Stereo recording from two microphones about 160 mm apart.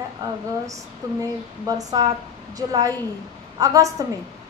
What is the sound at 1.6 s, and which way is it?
A woman's voice, 25° right (ahead or behind).